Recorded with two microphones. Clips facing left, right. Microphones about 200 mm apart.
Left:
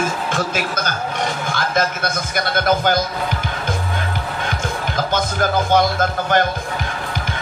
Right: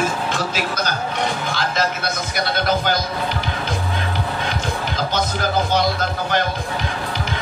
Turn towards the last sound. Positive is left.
turn(degrees=50)  # may be behind; listen again after turning